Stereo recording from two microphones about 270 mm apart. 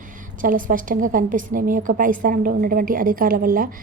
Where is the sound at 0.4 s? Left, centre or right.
Right.